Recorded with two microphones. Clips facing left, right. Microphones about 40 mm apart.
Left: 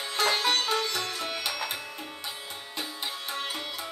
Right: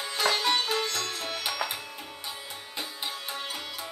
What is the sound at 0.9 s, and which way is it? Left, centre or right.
Sitar, centre.